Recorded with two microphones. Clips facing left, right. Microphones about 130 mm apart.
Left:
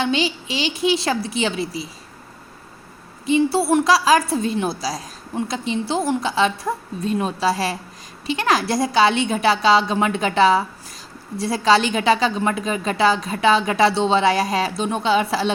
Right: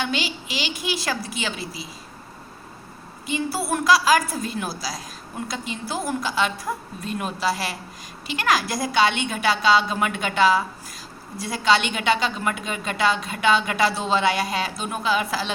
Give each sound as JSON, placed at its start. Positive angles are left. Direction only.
{"t": 0.0, "sound": "a woman's voice", "side_deg": 25}
{"t": 3.2, "sound": "a woman's voice", "side_deg": 30}